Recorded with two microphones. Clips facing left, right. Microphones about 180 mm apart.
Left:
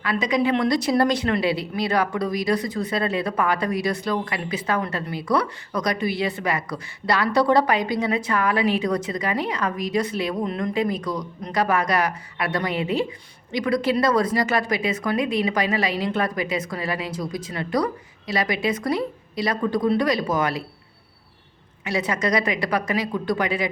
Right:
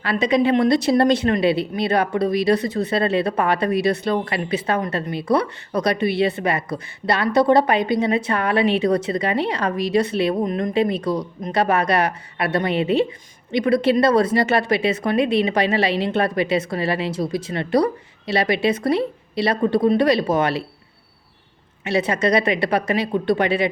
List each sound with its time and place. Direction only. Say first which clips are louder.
0.0 s a woman's voice: right 4 dB; 30° right (ahead or behind)
21.8 s speech: right 4 dB; 25° right (ahead or behind)